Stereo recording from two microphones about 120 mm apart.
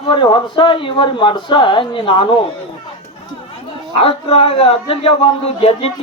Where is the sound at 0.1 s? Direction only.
40° left (ahead or behind).